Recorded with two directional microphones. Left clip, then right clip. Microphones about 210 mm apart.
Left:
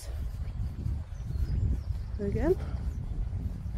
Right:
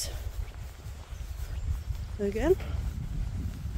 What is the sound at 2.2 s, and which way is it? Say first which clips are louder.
Speech: right 4 dB; 20° right (ahead or behind).